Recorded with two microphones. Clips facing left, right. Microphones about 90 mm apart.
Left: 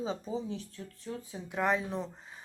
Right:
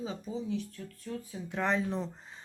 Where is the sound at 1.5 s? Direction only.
5° left (ahead or behind).